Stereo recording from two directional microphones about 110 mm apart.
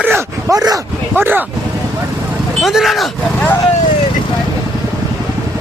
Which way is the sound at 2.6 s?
Centre (ahead or behind).